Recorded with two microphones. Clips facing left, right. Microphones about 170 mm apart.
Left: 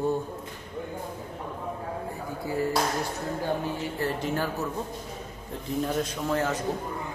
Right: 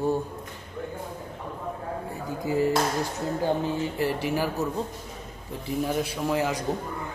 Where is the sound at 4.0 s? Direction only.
10° right (ahead or behind).